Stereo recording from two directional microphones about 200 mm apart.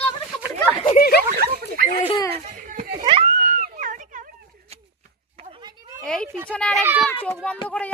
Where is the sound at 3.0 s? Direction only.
30° right (ahead or behind).